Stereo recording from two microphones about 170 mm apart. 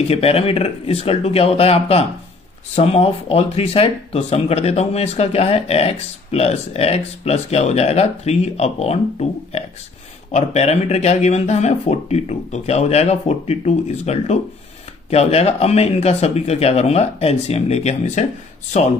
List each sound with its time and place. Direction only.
0.1 s speech: 35° left (ahead or behind)
10.3 s speech: 40° left (ahead or behind)